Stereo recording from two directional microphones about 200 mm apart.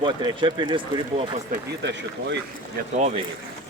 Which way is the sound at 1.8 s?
60° right (ahead or behind).